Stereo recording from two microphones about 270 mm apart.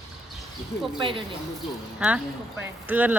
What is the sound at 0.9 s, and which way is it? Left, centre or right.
Speech, centre.